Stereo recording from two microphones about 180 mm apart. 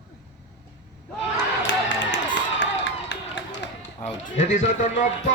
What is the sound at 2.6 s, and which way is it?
Crowd, 80° left.